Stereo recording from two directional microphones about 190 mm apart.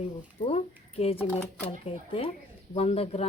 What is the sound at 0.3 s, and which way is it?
Speech, 30° left (ahead or behind).